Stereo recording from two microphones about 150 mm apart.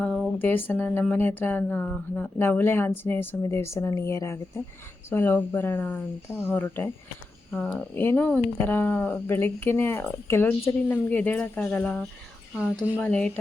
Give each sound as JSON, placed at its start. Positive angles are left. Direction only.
{"t": 0.0, "sound": "a sound", "side_deg": 5}
{"t": 0.3, "sound": "speech", "side_deg": 15}
{"t": 13.0, "sound": "speech", "side_deg": 5}